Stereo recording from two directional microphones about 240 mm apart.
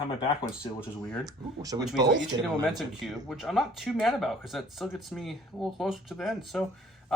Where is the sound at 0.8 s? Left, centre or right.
Centre.